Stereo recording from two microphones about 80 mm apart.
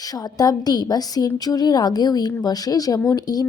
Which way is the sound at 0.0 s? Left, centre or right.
Left.